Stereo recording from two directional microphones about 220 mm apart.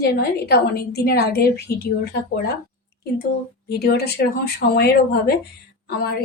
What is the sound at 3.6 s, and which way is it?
A woman's voice, 45° left (ahead or behind).